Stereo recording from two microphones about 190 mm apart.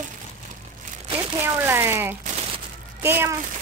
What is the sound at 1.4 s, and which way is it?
Speech, 10° right (ahead or behind).